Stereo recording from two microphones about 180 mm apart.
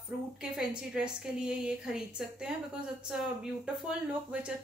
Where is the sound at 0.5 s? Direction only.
5° right (ahead or behind).